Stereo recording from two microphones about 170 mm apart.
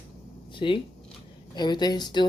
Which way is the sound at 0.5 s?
30° left (ahead or behind).